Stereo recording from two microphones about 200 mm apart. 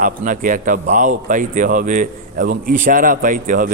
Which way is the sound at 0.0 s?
40° right (ahead or behind).